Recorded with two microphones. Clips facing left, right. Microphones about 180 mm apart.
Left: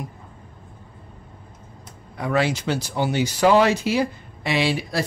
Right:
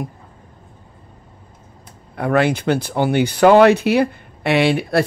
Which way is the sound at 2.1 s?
55° right (ahead or behind).